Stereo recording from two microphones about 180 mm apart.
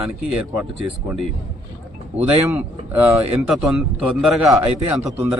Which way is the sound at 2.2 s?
10° right (ahead or behind).